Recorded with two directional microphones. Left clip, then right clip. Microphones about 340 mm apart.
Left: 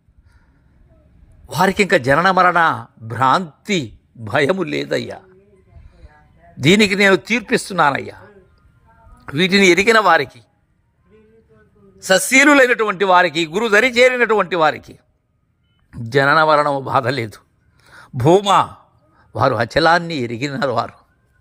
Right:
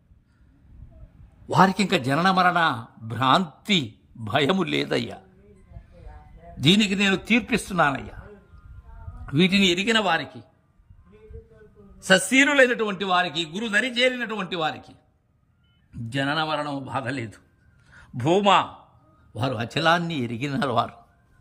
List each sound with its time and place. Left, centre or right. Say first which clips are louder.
1.5 s a man's voice: left 2 dB; centre
1.7 s a man's voice: left 9 dB; centre
2.0 s a man's voice: left 6 dB; centre
6.7 s a man's voice: left 9 dB; centre
7.3 s a man's voice: left 5 dB; centre
9.2 s a man's voice: left 7 dB; centre
9.8 s a man's voice: left 10 dB; centre
11.9 s a man's voice: left 6 dB; centre
16.1 s a man's voice: left 13 dB; centre
20.1 s a man's voice: left 6 dB; centre